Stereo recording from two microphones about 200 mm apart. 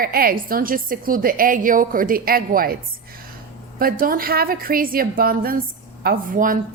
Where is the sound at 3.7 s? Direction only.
45° right (ahead or behind).